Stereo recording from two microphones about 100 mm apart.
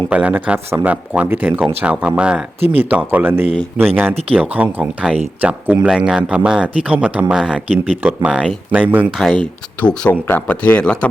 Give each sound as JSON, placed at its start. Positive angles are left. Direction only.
{"t": 0.1, "sound": "speech", "side_deg": -15}
{"t": 0.7, "sound": "speech", "side_deg": -25}
{"t": 9.1, "sound": "speech", "side_deg": -5}
{"t": 10.1, "sound": "speech", "side_deg": 20}